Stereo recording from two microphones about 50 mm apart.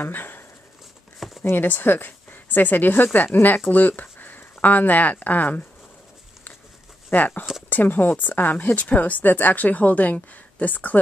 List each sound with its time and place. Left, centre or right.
0.0 s a sound: left
1.4 s speech: left
7.1 s speech: left